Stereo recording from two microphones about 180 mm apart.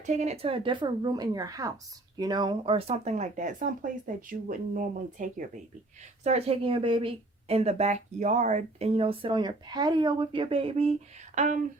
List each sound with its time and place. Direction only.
0.0 s speech: 40° right (ahead or behind)
6.2 s speech: 35° right (ahead or behind)
11.3 s speech: 45° right (ahead or behind)